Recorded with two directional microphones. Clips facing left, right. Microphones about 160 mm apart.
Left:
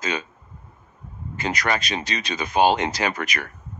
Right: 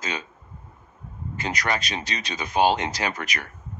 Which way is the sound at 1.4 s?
65° left (ahead or behind).